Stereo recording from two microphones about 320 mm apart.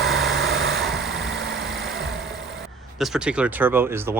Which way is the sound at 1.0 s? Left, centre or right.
Centre.